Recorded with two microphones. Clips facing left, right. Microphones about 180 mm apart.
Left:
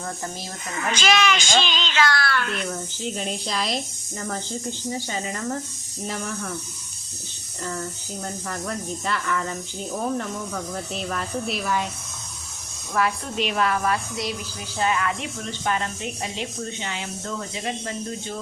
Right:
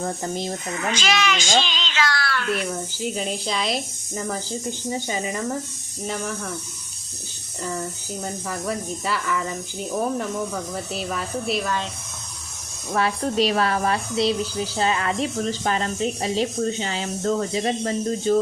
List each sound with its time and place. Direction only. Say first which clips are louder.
0.0 s speech: right 6 dB; 20° right (ahead or behind)
0.9 s speech: left 2 dB; 55° left (ahead or behind)
3.0 s speech: right 3 dB; centre (ahead or behind)
4.9 s speech: right 3 dB; 20° right (ahead or behind)
6.1 s speech: right 2 dB; centre (ahead or behind)
8.2 s speech: right 2 dB; 5° right (ahead or behind)
12.9 s a woman's voice: right 2 dB; 35° right (ahead or behind)